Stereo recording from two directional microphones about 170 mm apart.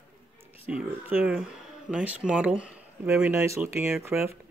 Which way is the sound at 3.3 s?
15° right (ahead or behind).